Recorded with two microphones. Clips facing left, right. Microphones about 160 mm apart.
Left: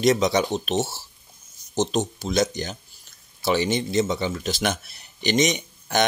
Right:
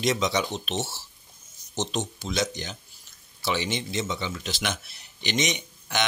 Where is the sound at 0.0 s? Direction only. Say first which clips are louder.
Left 6 dB; 45° left (ahead or behind).